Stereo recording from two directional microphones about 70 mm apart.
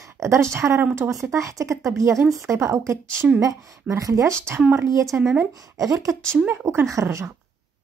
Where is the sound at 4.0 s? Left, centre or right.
Right.